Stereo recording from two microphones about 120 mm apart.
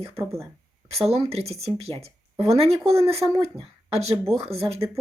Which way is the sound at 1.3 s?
60° right (ahead or behind).